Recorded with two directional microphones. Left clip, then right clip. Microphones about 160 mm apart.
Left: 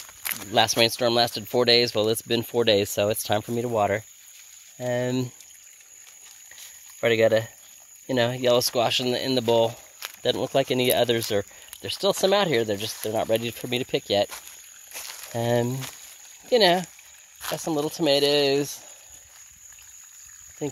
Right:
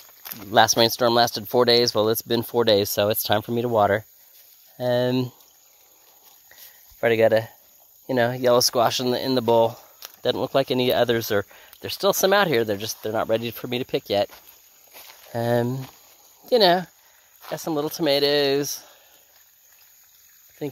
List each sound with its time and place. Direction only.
0.0 s a sound: 15° left (ahead or behind)
0.5 s speech: 20° right (ahead or behind)
7.0 s speech: 5° right (ahead or behind)
15.0 s a sound: 15° left (ahead or behind)
15.3 s speech: 15° right (ahead or behind)
17.4 s speech: centre (ahead or behind)